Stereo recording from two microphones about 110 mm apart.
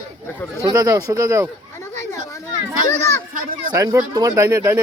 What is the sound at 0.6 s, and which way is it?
Speech, 35° right (ahead or behind).